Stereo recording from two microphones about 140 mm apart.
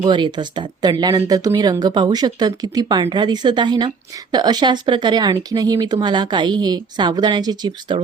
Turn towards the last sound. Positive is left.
turn(degrees=-30)  # may be behind; listen again after turning